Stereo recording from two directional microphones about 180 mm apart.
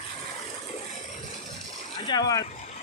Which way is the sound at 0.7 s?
45° left (ahead or behind).